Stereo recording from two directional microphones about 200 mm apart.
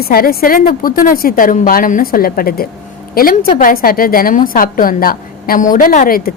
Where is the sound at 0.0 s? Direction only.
50° left (ahead or behind).